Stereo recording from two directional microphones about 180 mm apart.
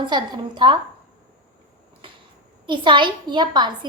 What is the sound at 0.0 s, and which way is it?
Speech, 25° right (ahead or behind).